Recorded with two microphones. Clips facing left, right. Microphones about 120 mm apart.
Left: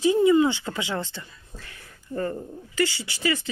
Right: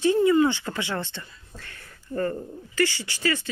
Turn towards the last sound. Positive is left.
turn(degrees=15)  # may be behind; listen again after turning